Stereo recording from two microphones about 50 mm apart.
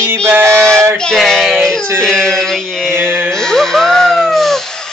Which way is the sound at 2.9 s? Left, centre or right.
Right.